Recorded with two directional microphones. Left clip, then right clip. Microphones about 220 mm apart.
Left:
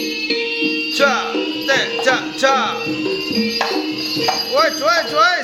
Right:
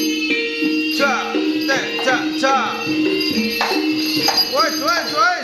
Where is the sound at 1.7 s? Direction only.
30° left (ahead or behind).